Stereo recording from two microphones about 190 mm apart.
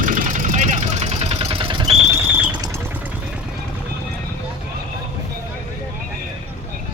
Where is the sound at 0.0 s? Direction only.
40° right (ahead or behind); by 1.9 s 25° right (ahead or behind).